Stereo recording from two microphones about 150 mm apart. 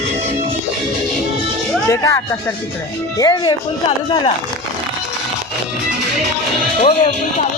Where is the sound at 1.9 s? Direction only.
20° left (ahead or behind).